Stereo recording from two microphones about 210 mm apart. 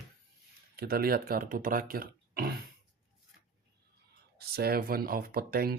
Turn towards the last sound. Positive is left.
turn(degrees=-45)  # may be behind; listen again after turning